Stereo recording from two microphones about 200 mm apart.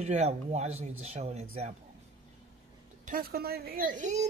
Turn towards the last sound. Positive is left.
turn(degrees=-35)  # may be behind; listen again after turning